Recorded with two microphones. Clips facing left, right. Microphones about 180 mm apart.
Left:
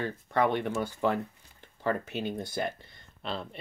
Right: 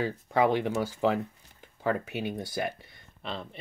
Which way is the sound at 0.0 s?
5° right (ahead or behind).